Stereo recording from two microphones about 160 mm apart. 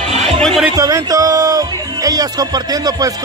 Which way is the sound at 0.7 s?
20° right (ahead or behind).